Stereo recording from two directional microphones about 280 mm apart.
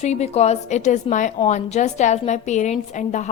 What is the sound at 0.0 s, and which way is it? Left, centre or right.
A woman's voice, left.